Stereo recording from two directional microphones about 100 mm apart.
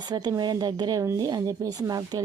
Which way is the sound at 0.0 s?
45° right (ahead or behind).